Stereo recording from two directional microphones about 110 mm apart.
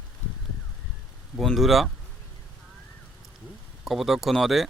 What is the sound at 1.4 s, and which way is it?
Speech, centre (ahead or behind).